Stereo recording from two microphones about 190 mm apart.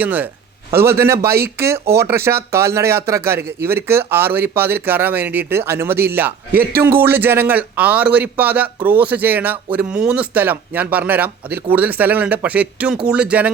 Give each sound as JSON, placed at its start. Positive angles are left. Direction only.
{"t": 0.0, "sound": "speech", "side_deg": -10}
{"t": 6.5, "sound": "speech", "side_deg": -55}
{"t": 6.8, "sound": "speech", "side_deg": -10}